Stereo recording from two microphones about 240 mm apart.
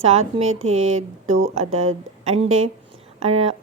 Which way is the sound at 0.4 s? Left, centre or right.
Right.